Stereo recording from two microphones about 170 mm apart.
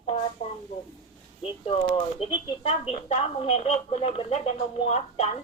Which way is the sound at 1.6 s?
35° left (ahead or behind).